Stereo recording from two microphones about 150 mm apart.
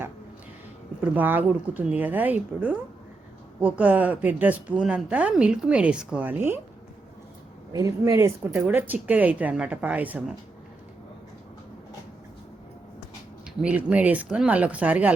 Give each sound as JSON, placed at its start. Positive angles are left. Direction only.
{"t": 1.0, "sound": "a woman's voice", "side_deg": -10}
{"t": 7.7, "sound": "speech", "side_deg": -20}
{"t": 8.5, "sound": "a woman's voice", "side_deg": -10}
{"t": 13.6, "sound": "a woman's voice", "side_deg": -5}